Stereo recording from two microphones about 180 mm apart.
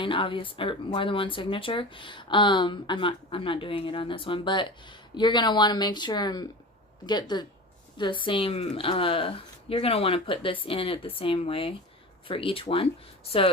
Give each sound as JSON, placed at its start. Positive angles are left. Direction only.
{"t": 0.0, "sound": "speech", "side_deg": 30}